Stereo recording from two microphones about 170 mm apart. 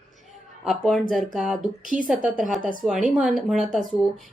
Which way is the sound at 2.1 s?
5° right (ahead or behind).